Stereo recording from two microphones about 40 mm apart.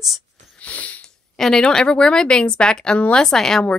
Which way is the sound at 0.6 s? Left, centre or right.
Left.